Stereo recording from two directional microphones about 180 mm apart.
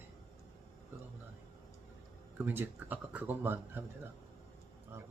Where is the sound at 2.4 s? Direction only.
10° right (ahead or behind).